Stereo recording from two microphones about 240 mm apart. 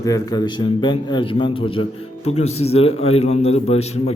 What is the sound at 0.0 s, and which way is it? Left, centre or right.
A man's voice, centre.